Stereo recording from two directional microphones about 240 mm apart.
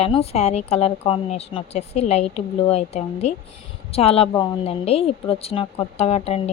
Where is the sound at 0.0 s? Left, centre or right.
Left.